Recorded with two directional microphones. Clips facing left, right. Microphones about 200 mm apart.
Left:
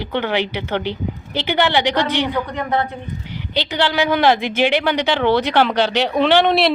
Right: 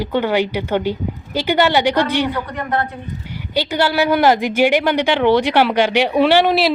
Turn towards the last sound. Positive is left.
turn(degrees=-5)  # may be behind; listen again after turning